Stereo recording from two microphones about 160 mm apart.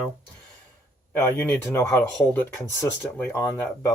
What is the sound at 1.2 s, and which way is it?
Speech, 15° left (ahead or behind).